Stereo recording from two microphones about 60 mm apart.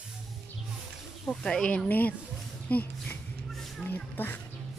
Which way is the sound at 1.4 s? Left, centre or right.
Centre.